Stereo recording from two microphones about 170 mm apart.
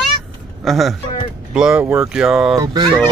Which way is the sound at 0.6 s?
Centre (ahead or behind).